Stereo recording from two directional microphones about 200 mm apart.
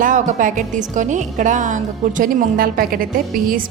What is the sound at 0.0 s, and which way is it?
A woman's voice, 40° right (ahead or behind).